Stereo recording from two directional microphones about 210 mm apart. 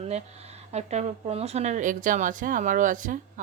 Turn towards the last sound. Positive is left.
turn(degrees=-40)  # may be behind; listen again after turning